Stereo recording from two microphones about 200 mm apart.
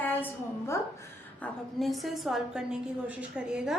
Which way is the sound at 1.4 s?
Centre (ahead or behind).